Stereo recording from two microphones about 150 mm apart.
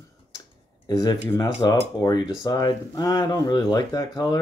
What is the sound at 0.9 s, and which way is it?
Speech, 25° left (ahead or behind).